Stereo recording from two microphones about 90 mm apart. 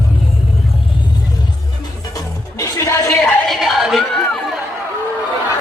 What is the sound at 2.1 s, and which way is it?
Music, 35° left (ahead or behind).